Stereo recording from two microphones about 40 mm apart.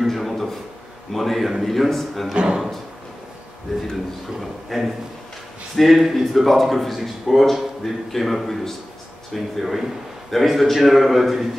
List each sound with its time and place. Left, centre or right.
0.0 s a sound: centre
1.1 s speech: centre
2.3 s speech: right
4.4 s speech: centre